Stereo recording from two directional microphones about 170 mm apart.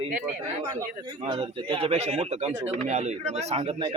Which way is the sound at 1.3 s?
30° right (ahead or behind).